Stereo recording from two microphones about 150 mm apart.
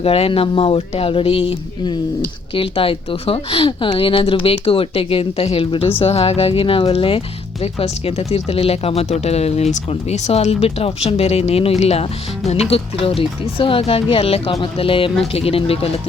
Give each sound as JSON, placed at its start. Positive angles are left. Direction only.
{"t": 0.0, "sound": "speech", "side_deg": 40}